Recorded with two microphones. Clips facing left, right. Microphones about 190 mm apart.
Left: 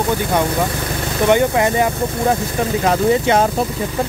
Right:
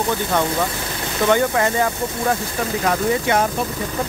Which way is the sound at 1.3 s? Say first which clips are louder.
Left 3 dB; 20° left (ahead or behind).